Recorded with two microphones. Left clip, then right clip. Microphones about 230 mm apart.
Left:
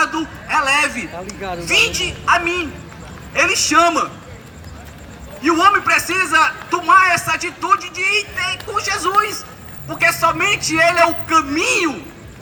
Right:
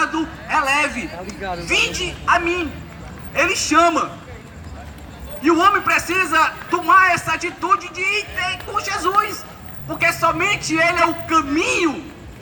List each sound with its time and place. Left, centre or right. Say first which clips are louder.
0.0 s a man's voice: left 2 dB; left
5.4 s a man's voice: left 2 dB; left